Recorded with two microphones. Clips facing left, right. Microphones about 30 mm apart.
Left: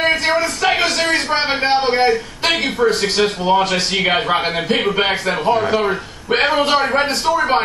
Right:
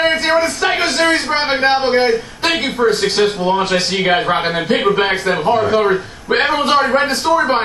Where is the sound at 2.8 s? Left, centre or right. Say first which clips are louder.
Right 3 dB; centre.